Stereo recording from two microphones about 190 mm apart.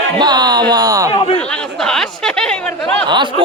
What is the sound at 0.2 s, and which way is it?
Speech, 20° right (ahead or behind).